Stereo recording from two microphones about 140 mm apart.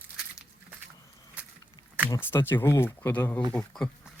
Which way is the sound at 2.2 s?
15° left (ahead or behind).